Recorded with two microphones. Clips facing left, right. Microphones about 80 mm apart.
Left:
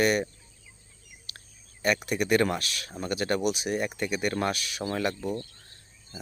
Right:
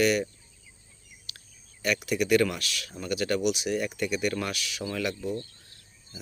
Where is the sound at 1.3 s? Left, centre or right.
Left.